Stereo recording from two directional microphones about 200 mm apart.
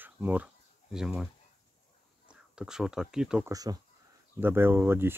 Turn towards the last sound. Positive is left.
turn(degrees=-10)  # may be behind; listen again after turning